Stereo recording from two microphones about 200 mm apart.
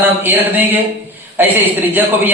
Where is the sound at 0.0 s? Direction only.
10° right (ahead or behind).